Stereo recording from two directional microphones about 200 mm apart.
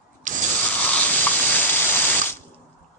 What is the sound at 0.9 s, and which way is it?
Spray, 10° left (ahead or behind).